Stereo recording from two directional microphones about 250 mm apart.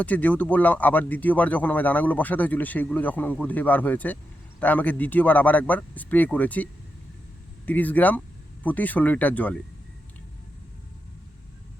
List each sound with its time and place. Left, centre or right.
0.0 s speech: centre
7.7 s speech: centre